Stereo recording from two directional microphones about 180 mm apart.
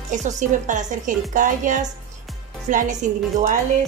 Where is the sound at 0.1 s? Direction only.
45° right (ahead or behind).